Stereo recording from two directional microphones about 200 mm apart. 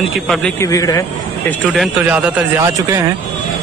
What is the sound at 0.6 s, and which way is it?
Speech, 15° left (ahead or behind).